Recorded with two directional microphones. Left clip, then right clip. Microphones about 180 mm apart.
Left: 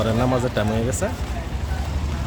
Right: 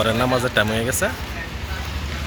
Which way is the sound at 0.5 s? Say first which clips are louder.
Right 4 dB; 5° left (ahead or behind).